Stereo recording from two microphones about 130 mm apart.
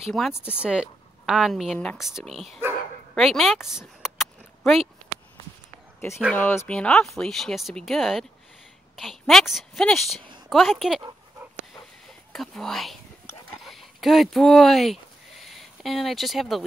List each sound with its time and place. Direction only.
0.2 s speech: centre (ahead or behind)
3.2 s a sound: centre (ahead or behind)
6.3 s speech: 15° left (ahead or behind)
6.7 s speech: 5° left (ahead or behind)
12.3 s speech: 5° left (ahead or behind)
13.5 s a sound: centre (ahead or behind)